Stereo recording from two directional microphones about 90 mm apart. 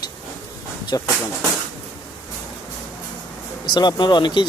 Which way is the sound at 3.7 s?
55° left (ahead or behind).